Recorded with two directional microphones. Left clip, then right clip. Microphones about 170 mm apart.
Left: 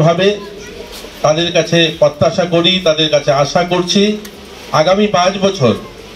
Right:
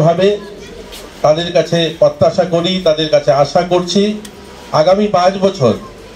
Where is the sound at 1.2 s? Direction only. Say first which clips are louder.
Right 1 dB; 50° right (ahead or behind).